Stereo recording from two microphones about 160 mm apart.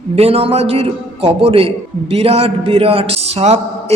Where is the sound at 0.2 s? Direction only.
40° right (ahead or behind).